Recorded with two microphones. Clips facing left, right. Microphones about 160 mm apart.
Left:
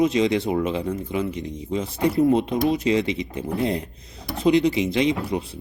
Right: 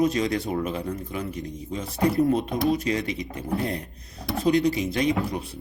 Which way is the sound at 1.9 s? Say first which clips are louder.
Even; centre (ahead or behind).